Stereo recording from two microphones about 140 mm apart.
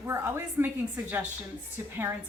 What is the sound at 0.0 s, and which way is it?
Speech, 15° right (ahead or behind).